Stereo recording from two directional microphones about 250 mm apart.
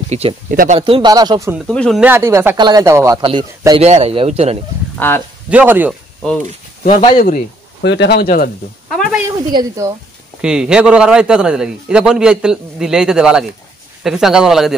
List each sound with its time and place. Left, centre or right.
0.1 s speech: right
1.7 s speech: centre; by 4.6 s right
4.9 s speech: centre
5.5 s a man's voice: centre
6.8 s speech: left
7.8 s speech: left
9.5 s speech: centre
10.4 s a man's voice: centre